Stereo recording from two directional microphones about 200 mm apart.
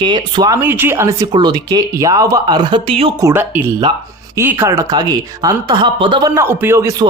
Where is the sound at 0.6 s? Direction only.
10° right (ahead or behind); by 3.1 s 25° right (ahead or behind).